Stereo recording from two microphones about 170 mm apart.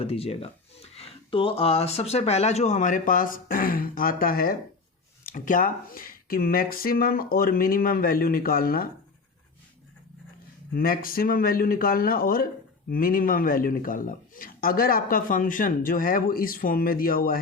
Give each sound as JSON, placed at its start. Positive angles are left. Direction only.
{"t": 0.0, "sound": "speech", "side_deg": 35}
{"t": 10.8, "sound": "speech", "side_deg": 55}